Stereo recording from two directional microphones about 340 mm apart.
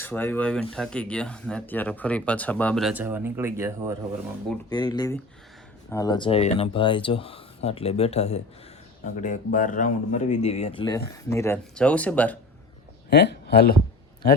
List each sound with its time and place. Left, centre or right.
0.0 s speech: centre
4.7 s speech: centre
13.1 s speech: left